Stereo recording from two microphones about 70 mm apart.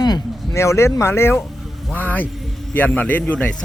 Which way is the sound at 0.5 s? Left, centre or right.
Left.